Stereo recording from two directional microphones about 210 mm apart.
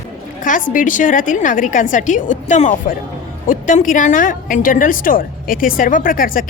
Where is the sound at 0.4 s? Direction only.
40° left (ahead or behind).